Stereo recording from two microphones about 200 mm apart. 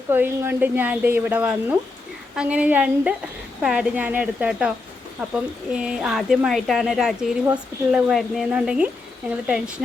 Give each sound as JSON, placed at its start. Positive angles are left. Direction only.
{"t": 0.1, "sound": "a woman's voice", "side_deg": -10}